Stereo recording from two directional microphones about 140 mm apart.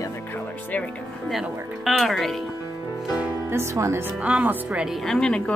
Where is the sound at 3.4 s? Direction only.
20° right (ahead or behind).